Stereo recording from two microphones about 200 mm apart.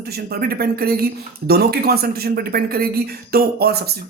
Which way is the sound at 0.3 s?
50° right (ahead or behind).